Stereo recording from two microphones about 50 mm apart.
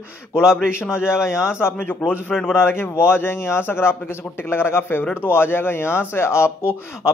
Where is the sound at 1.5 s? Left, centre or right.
Left.